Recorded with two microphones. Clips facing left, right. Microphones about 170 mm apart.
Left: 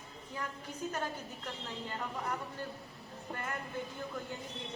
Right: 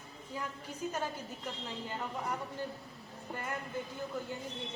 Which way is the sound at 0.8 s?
10° right (ahead or behind).